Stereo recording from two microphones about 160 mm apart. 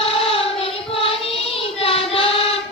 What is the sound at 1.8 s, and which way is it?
Child singing, 35° left (ahead or behind).